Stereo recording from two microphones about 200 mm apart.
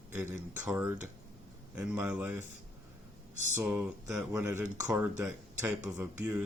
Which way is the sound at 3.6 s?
10° right (ahead or behind).